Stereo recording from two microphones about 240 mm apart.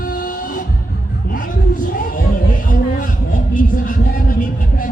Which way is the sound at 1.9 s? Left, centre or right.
Left.